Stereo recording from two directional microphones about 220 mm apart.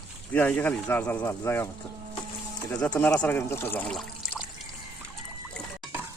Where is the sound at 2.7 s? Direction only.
5° left (ahead or behind).